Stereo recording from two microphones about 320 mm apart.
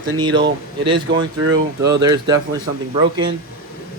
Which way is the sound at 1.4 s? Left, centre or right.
Right.